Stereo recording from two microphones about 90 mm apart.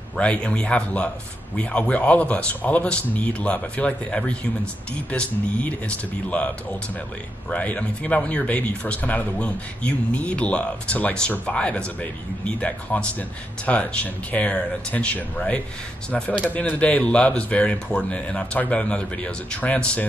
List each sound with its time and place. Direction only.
0.2 s speech: 10° left (ahead or behind)